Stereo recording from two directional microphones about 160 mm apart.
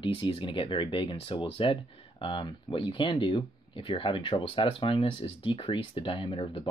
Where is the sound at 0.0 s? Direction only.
35° left (ahead or behind).